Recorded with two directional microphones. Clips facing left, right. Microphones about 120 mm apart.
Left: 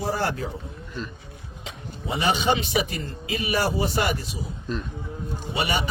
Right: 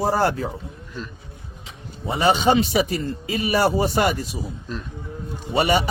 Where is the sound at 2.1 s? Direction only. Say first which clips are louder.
Right 5 dB; 40° right (ahead or behind).